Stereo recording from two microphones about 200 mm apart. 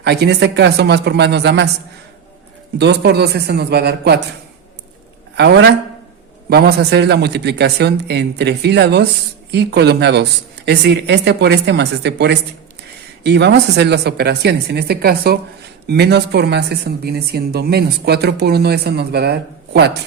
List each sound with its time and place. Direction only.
0.0 s speech: 55° right (ahead or behind)
2.7 s speech: 55° right (ahead or behind)
5.4 s speech: 55° right (ahead or behind)